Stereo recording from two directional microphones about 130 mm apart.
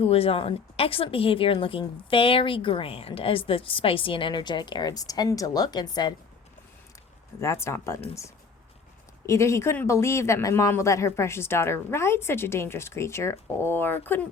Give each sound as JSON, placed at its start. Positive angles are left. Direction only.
{"t": 0.0, "sound": "a woman's voice", "side_deg": 50}
{"t": 7.3, "sound": "speech", "side_deg": 20}
{"t": 9.2, "sound": "speech", "side_deg": 20}